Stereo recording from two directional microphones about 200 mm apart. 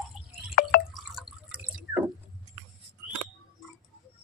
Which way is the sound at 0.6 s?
50° left (ahead or behind).